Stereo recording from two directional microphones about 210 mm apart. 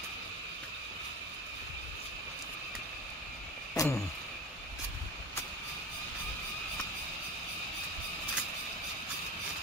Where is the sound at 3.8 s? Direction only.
15° left (ahead or behind).